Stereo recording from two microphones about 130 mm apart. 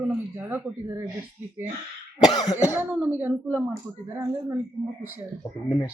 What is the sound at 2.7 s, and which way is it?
Speech, 15° right (ahead or behind).